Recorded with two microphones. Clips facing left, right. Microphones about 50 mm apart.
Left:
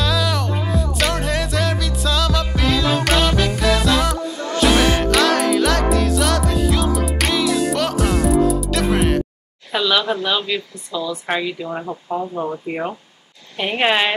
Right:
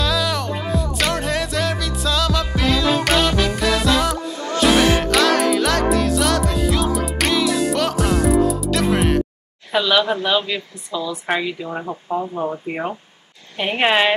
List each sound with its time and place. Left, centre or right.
0.0 s music: centre
9.7 s speech: centre
10.9 s a woman's voice: right
11.2 s speech: centre